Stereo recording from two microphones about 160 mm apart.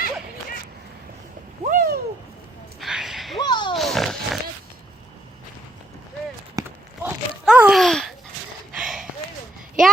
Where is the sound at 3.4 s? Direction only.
25° left (ahead or behind).